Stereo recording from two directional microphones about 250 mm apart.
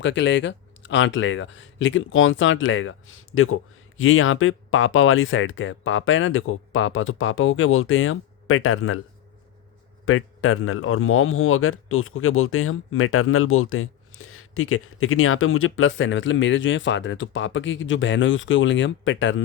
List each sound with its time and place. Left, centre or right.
0.0 s speech: left
10.1 s speech: left